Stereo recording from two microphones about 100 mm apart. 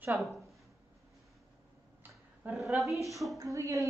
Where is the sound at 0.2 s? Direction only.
Centre (ahead or behind).